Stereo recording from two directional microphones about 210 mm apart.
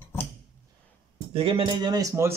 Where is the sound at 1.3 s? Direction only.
25° right (ahead or behind).